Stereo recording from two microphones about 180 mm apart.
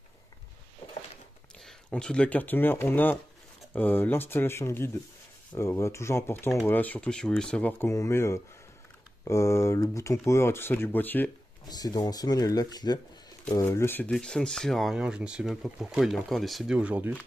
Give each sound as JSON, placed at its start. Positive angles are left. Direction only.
{"t": 1.6, "sound": "speech", "side_deg": 5}
{"t": 11.6, "sound": "speech", "side_deg": 20}